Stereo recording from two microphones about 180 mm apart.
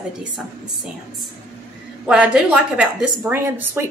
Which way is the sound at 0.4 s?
Centre (ahead or behind).